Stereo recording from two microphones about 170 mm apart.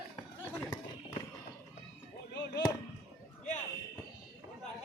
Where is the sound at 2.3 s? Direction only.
80° left.